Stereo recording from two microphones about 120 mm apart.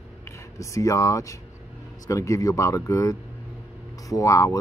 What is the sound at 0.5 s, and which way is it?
Speech, 25° left (ahead or behind).